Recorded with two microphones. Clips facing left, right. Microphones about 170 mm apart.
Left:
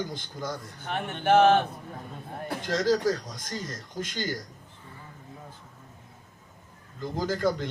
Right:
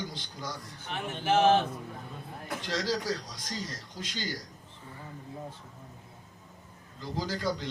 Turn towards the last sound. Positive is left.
turn(degrees=50)  # may be behind; listen again after turning